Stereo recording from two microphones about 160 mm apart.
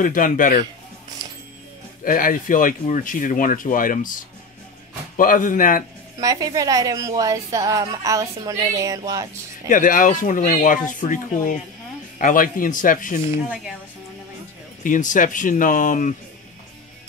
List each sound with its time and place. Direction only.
0.0 s speech: 55° left (ahead or behind)
2.0 s speech: 60° left (ahead or behind)
6.1 s a woman's voice: 20° right (ahead or behind)
9.7 s speech: 55° left (ahead or behind)
14.8 s speech: 55° left (ahead or behind)